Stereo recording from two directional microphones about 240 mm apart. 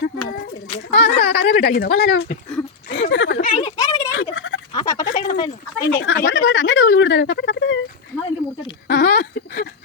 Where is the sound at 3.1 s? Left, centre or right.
Left.